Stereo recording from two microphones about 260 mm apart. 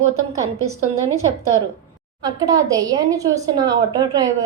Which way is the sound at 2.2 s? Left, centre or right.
Centre.